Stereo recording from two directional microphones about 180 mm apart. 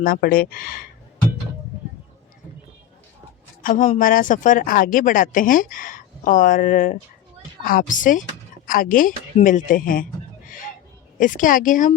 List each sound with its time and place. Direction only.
0.0 s speech: 55° left (ahead or behind)
3.6 s speech: 45° left (ahead or behind)